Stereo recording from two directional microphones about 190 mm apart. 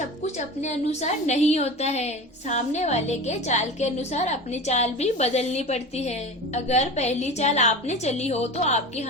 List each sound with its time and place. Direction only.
0.3 s a woman's voice: 35° left (ahead or behind)